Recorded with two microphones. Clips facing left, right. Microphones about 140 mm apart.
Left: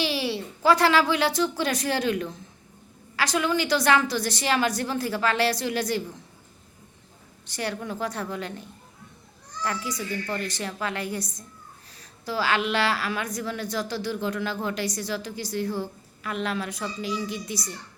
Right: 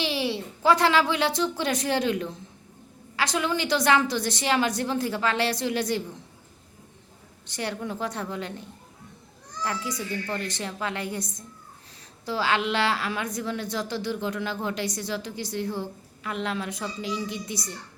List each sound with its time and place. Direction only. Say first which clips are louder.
0.0 s a woman's voice: even; 20° right (ahead or behind)
7.4 s a woman's voice: even; 20° right (ahead or behind)
9.6 s a woman's voice: left 1 dB; 20° right (ahead or behind)